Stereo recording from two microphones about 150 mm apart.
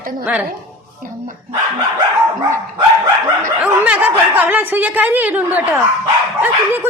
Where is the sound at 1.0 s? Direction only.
65° right (ahead or behind).